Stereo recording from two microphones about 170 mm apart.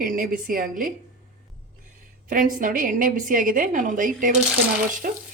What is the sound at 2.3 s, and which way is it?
A woman's voice, 50° right (ahead or behind).